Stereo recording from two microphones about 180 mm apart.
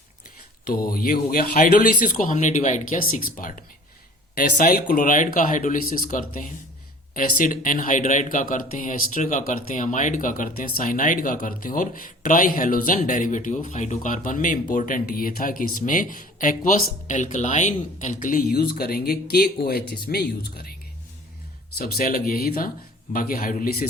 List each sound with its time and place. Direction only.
0.6 s speech: 55° left (ahead or behind)
18.5 s speech: 60° left (ahead or behind)
21.8 s speech: 55° left (ahead or behind)